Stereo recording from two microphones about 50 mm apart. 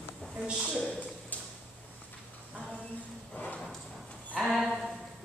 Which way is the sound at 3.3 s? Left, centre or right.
Left.